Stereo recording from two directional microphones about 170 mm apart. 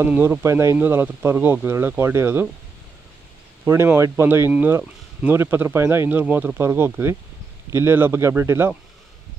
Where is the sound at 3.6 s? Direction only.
10° right (ahead or behind).